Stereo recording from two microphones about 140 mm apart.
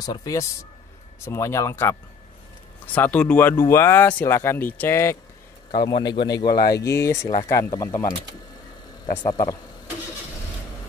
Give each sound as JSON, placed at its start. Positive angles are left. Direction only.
{"t": 0.0, "sound": "speech", "side_deg": 25}
{"t": 5.8, "sound": "speech", "side_deg": 30}
{"t": 9.1, "sound": "speech", "side_deg": 35}